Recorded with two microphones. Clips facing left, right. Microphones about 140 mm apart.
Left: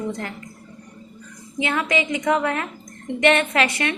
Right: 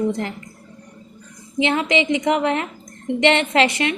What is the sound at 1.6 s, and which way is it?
A woman's voice, 25° right (ahead or behind).